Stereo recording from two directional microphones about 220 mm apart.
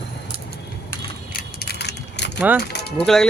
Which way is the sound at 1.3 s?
45° left (ahead or behind).